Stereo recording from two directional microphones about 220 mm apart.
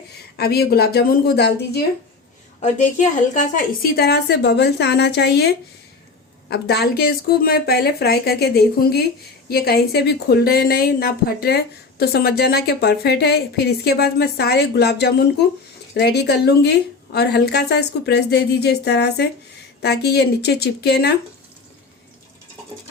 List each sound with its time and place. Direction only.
0.3 s a woman's voice: 45° left (ahead or behind)
2.6 s a woman's voice: 35° left (ahead or behind)